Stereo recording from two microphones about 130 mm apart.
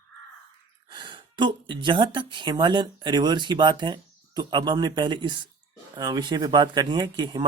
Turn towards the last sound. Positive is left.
turn(degrees=-35)  # may be behind; listen again after turning